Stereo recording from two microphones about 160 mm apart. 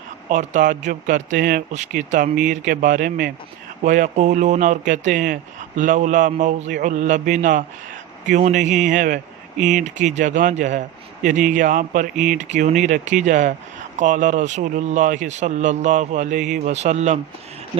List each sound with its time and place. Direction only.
0.3 s speech: 55° right (ahead or behind)